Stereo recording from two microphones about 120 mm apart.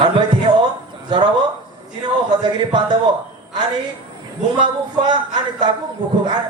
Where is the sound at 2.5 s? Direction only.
40° right (ahead or behind).